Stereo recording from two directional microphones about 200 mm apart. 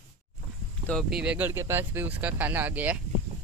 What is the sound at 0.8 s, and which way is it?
Speech, centre (ahead or behind).